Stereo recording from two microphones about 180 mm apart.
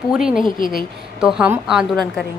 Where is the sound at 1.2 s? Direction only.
5° right (ahead or behind).